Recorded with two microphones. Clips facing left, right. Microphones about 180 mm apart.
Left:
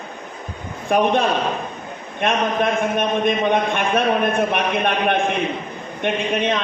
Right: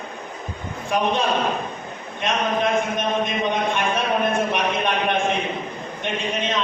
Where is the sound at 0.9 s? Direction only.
55° left (ahead or behind).